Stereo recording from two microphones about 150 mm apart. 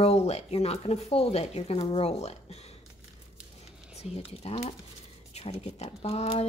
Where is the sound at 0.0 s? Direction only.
45° left (ahead or behind).